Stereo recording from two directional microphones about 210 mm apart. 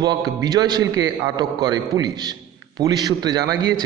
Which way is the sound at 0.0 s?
20° right (ahead or behind).